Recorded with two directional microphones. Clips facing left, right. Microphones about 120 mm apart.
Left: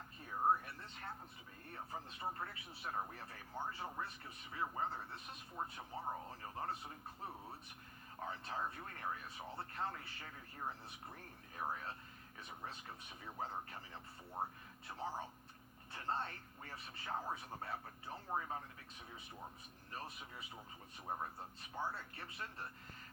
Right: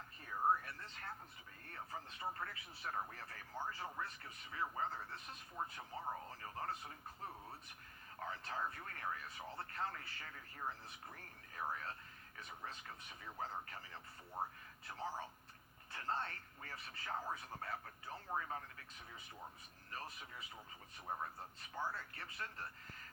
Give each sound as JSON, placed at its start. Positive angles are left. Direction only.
{"t": 0.3, "sound": "a sound", "side_deg": 15}
{"t": 1.7, "sound": "a man's voice", "side_deg": 15}
{"t": 8.2, "sound": "a man's voice", "side_deg": 15}
{"t": 15.9, "sound": "a man's voice", "side_deg": 20}
{"t": 19.9, "sound": "a man's voice", "side_deg": 15}
{"t": 21.8, "sound": "speech", "side_deg": 20}